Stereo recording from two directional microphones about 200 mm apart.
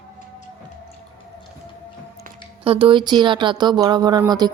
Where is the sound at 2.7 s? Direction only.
25° right (ahead or behind).